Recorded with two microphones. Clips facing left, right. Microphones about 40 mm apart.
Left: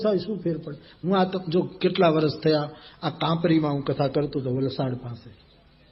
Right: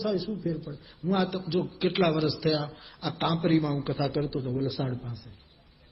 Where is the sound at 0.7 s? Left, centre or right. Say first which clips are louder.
Left 4 dB; left.